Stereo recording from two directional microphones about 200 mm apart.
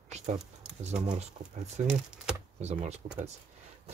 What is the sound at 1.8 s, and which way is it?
Speech, 35° right (ahead or behind).